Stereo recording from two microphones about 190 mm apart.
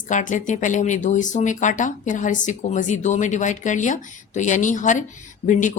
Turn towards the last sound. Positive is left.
turn(degrees=40)  # may be behind; listen again after turning